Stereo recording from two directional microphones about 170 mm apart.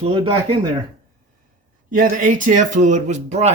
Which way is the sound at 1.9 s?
55° right (ahead or behind).